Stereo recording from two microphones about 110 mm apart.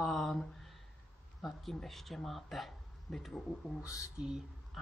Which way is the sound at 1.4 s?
Centre (ahead or behind).